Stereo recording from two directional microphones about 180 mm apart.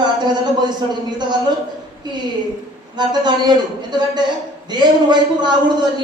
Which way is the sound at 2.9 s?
25° right (ahead or behind).